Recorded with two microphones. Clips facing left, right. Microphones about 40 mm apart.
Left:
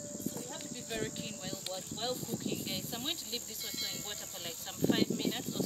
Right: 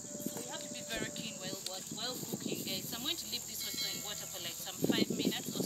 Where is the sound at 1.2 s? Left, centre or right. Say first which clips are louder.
Left 2 dB; centre.